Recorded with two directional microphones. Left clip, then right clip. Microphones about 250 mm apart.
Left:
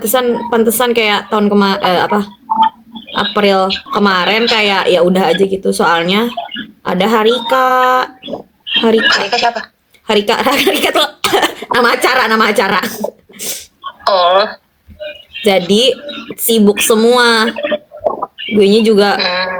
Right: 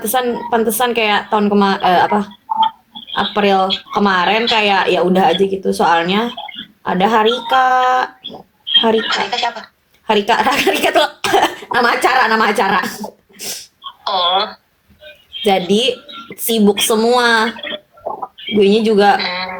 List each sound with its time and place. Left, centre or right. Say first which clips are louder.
0.0 s speech: left 4 dB; centre
14.0 s speech: left 6 dB; centre
15.4 s speech: left 4 dB; centre